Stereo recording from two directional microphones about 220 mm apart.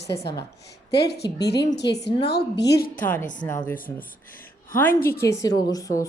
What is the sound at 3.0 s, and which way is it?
A woman's voice, 10° left (ahead or behind).